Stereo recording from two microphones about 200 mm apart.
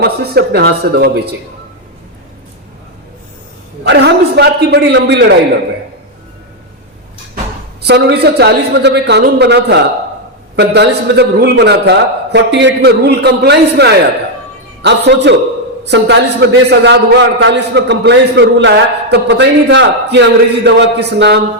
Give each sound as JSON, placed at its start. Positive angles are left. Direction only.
{"t": 0.0, "sound": "speech", "side_deg": -55}
{"t": 3.8, "sound": "a sound", "side_deg": -55}
{"t": 7.9, "sound": "a man's voice", "side_deg": -55}